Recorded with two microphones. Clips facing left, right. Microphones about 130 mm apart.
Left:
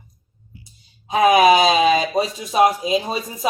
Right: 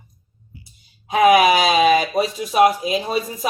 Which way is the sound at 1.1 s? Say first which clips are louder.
Even; 25° left (ahead or behind).